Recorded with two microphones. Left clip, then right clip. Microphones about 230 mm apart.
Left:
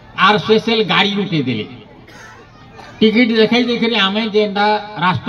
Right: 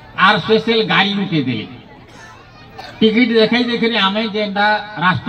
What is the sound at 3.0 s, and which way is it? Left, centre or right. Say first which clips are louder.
Speech: even; left.